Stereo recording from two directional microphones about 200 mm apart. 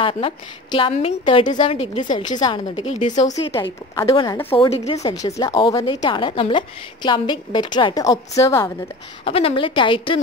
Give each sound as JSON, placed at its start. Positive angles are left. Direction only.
{"t": 0.0, "sound": "a woman's voice", "side_deg": 25}
{"t": 4.1, "sound": "a woman's voice", "side_deg": 25}
{"t": 5.1, "sound": "a woman's voice", "side_deg": 20}
{"t": 9.2, "sound": "a woman's voice", "side_deg": 25}